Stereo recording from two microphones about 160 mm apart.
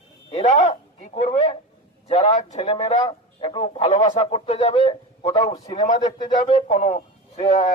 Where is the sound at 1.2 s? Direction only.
45° left (ahead or behind).